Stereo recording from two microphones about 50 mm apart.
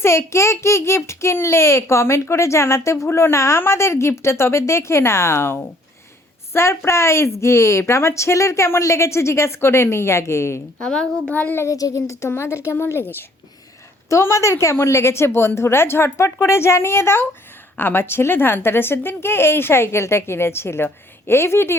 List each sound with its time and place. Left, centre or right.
0.0 s a child's voice: left
3.1 s a woman's voice: left
10.8 s a woman's voice: left
11.5 s speech: left
12.3 s a woman's voice: left
14.1 s a woman's voice: left